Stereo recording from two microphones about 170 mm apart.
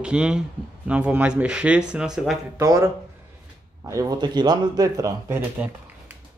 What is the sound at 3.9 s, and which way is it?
Speech, 20° right (ahead or behind).